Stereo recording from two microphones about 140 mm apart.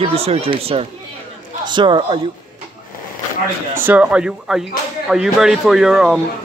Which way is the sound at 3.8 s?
10° right (ahead or behind).